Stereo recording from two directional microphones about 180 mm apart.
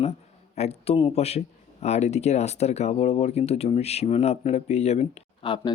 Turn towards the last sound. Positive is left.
turn(degrees=25)  # may be behind; listen again after turning